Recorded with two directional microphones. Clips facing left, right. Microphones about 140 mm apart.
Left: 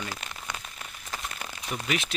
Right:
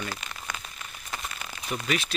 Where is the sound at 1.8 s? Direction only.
20° left (ahead or behind).